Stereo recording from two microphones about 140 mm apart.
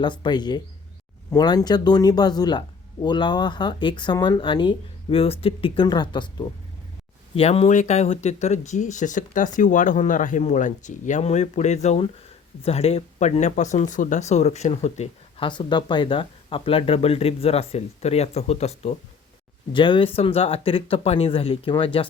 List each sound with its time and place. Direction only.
0.0 s speech: 35° left (ahead or behind)
7.3 s speech: 45° left (ahead or behind)
15.4 s speech: 35° left (ahead or behind); by 18.9 s 50° left (ahead or behind)
19.7 s speech: 35° left (ahead or behind)